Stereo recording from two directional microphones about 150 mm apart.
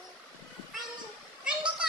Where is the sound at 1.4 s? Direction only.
5° right (ahead or behind).